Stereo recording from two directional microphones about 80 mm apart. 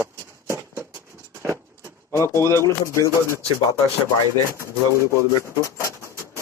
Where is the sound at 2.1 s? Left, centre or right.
Left.